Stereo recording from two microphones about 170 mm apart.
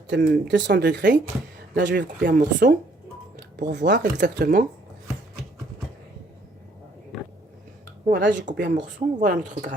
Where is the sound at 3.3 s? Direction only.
80° right.